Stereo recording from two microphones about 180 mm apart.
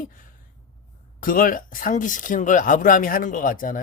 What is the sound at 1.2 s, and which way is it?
Speech, 50° left (ahead or behind).